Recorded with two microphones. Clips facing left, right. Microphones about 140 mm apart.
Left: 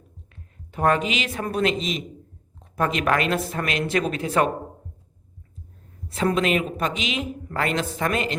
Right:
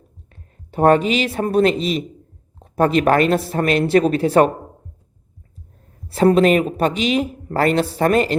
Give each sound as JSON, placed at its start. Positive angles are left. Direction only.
{"t": 0.3, "sound": "a woman's voice", "side_deg": -30}
{"t": 6.1, "sound": "speech", "side_deg": -35}